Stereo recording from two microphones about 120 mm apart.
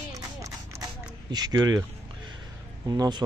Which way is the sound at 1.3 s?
35° right (ahead or behind).